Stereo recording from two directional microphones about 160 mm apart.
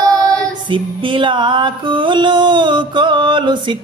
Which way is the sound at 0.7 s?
30° right (ahead or behind).